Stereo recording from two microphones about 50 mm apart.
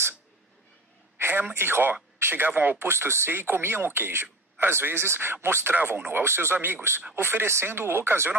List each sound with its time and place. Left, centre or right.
1.1 s a sound: right
1.5 s speech: right
2.9 s speech: right
5.9 s speech: right